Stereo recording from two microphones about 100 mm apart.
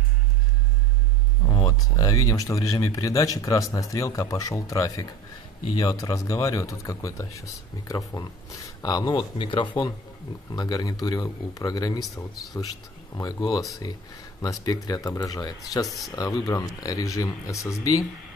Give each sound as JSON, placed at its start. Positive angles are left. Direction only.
{"t": 1.4, "sound": "speech", "side_deg": 35}
{"t": 9.4, "sound": "speech", "side_deg": 55}
{"t": 10.5, "sound": "speech", "side_deg": 40}
{"t": 13.1, "sound": "speech", "side_deg": 40}